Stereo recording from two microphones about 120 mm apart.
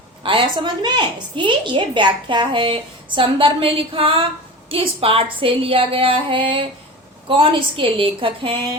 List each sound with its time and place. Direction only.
0.2 s a woman's voice: 45° right (ahead or behind)